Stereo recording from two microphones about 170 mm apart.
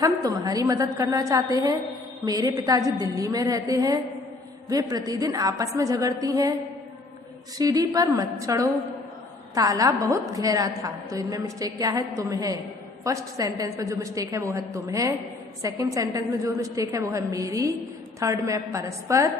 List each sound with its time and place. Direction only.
0.2 s a woman's voice: 20° right (ahead or behind)
7.6 s a woman's voice: 20° right (ahead or behind)